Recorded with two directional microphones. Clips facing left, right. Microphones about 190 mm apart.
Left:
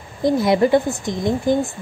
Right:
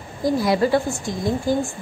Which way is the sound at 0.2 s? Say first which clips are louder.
Left 3 dB; 20° left (ahead or behind).